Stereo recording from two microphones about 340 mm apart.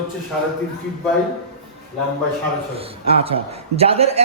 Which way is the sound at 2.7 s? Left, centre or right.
Centre.